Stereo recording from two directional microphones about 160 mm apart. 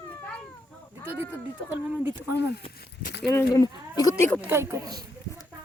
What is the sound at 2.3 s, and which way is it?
Speech, 90° left.